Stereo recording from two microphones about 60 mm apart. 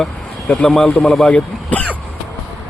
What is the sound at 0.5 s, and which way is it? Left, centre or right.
A man's voice, left.